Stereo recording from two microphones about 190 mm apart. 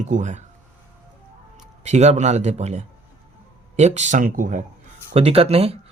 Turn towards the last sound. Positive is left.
turn(degrees=-30)  # may be behind; listen again after turning